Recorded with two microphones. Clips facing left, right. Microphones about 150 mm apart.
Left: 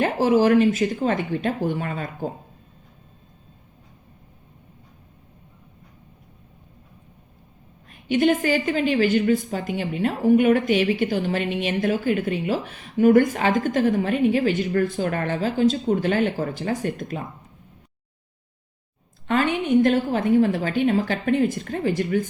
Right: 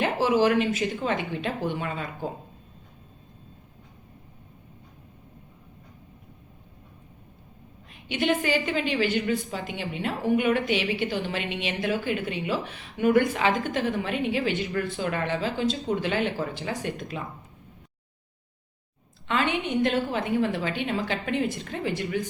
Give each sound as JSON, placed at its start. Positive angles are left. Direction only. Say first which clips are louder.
{"t": 0.0, "sound": "a woman's voice", "louder": "left 4 dB", "side_deg": 45}
{"t": 7.9, "sound": "a woman's voice", "louder": "left 6 dB", "side_deg": 45}
{"t": 19.3, "sound": "a woman's voice", "louder": "left 6 dB", "side_deg": 45}